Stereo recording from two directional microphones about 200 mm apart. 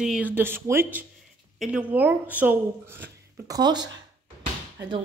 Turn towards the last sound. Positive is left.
turn(degrees=-20)  # may be behind; listen again after turning